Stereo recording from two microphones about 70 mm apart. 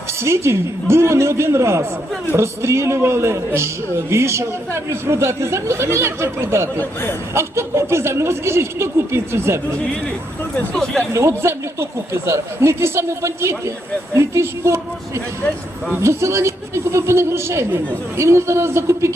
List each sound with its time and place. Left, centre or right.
0.2 s a man's voice: right
11.1 s a man's voice: right